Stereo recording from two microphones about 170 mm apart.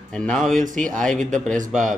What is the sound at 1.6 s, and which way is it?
Speech, 50° right (ahead or behind).